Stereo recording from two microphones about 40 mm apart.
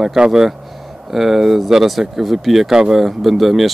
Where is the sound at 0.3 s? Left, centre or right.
Centre.